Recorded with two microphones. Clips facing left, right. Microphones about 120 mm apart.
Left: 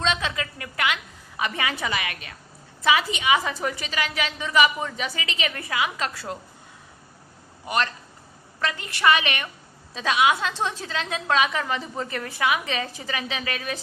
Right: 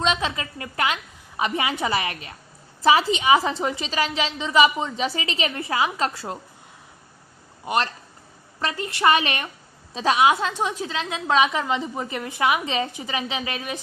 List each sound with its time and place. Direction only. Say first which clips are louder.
0.0 s a sound: right 2 dB; 25° right (ahead or behind)
1.4 s a woman's voice: right 3 dB; 25° right (ahead or behind)
7.6 s a man's voice: right 2 dB; 25° right (ahead or behind)
10.5 s a woman's voice: right 2 dB; 15° right (ahead or behind)